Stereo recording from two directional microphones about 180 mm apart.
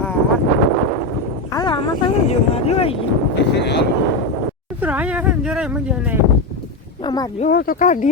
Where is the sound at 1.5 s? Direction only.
25° left (ahead or behind).